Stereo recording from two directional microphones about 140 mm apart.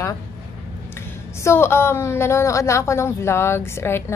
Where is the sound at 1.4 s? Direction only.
15° left (ahead or behind).